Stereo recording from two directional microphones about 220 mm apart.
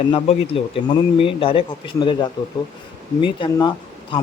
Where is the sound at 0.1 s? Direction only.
25° left (ahead or behind).